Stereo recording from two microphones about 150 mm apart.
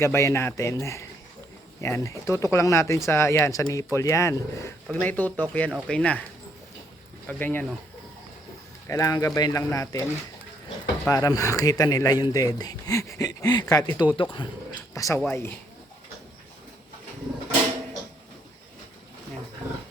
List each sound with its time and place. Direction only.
0.0 s speech: 20° left (ahead or behind)
7.3 s speech: 10° left (ahead or behind)
8.9 s speech: 20° left (ahead or behind)
11.1 s speech: 25° left (ahead or behind)
14.9 s speech: 20° left (ahead or behind)